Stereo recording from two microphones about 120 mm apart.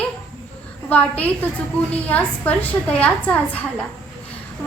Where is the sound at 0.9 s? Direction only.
10° left (ahead or behind).